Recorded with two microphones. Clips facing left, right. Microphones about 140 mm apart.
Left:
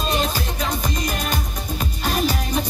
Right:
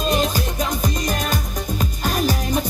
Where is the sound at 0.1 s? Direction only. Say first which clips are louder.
Right 2 dB; 45° right (ahead or behind).